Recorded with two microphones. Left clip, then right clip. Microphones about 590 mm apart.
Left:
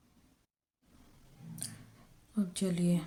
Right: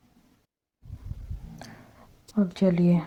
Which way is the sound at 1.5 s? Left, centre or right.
Left.